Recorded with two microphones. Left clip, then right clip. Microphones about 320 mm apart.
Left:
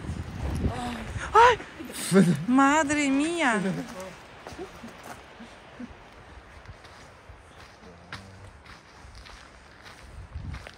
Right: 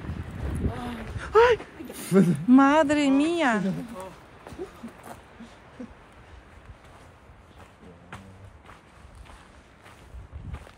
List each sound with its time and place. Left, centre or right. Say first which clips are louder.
0.4 s boat: left 1 dB; left
1.1 s a sound: left 1 dB; centre
2.0 s speech: even; left
2.5 s speech: right 3 dB; centre